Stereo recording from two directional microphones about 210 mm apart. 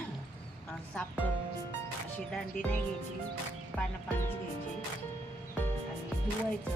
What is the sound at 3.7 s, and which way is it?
Speech, 5° left (ahead or behind).